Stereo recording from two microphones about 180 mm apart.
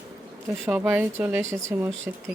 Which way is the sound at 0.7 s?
10° right (ahead or behind).